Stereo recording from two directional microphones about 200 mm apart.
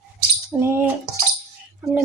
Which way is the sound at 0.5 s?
10° right (ahead or behind).